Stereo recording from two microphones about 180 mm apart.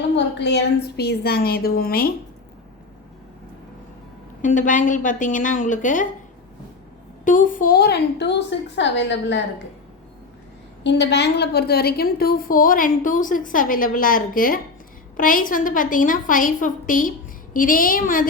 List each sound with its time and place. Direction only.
0.3 s a woman's voice: 70° left (ahead or behind); by 2.1 s 55° left (ahead or behind)
4.4 s a woman's voice: 45° left (ahead or behind)
7.3 s a woman's voice: 45° left (ahead or behind); by 9.4 s 80° left
10.8 s a woman's voice: 75° left (ahead or behind); by 18.3 s 50° left (ahead or behind)